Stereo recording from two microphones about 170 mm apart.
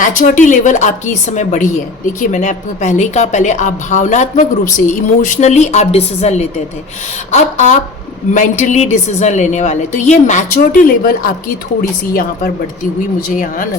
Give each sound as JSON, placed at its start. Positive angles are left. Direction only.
{"t": 0.0, "sound": "a woman's voice", "side_deg": 50}
{"t": 13.3, "sound": "a woman's voice", "side_deg": 55}